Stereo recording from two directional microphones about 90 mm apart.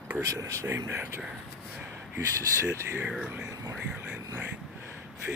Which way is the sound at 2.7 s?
30° right (ahead or behind).